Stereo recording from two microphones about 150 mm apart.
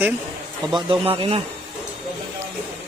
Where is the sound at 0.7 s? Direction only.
35° right (ahead or behind).